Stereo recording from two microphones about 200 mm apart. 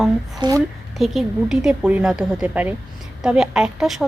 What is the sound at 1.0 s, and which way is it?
A woman's voice, centre (ahead or behind).